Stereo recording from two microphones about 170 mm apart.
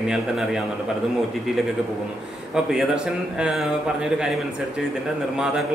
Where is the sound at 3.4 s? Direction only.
Centre (ahead or behind).